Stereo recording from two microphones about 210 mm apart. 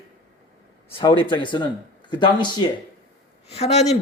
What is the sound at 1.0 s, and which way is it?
A man's voice, 20° left (ahead or behind).